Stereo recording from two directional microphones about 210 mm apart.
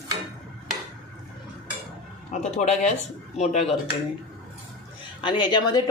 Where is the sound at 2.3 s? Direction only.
35° left (ahead or behind).